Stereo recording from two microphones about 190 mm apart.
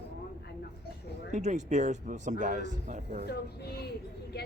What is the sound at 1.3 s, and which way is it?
Speech, 40° right (ahead or behind).